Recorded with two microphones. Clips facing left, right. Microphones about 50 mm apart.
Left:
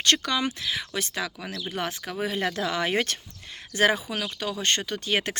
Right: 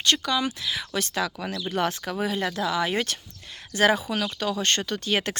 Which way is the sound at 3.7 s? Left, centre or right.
Left.